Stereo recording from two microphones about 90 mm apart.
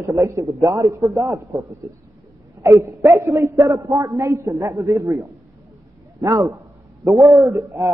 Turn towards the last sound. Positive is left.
turn(degrees=-35)  # may be behind; listen again after turning